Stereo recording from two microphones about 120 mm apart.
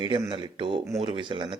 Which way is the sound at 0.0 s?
40° right (ahead or behind).